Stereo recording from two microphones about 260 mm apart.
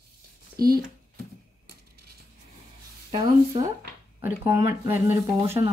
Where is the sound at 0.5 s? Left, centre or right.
Right.